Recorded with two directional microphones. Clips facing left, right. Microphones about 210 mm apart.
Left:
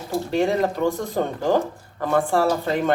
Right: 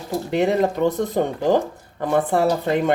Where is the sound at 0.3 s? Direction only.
20° right (ahead or behind).